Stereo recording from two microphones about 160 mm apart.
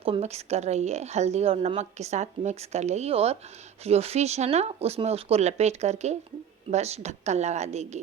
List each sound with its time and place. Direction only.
0.0 s a woman's voice: 40° right (ahead or behind)